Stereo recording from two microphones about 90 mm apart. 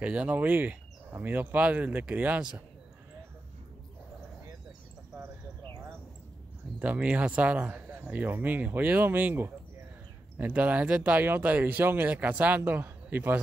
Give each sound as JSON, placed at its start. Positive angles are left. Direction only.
{"t": 0.0, "sound": "speech", "side_deg": -15}
{"t": 6.8, "sound": "speech", "side_deg": -15}